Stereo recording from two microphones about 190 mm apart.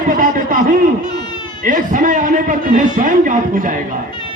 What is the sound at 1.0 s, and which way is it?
Baby cry, 20° left (ahead or behind).